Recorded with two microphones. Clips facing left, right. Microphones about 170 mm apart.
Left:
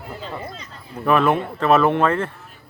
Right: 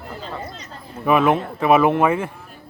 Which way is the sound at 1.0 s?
10° right (ahead or behind).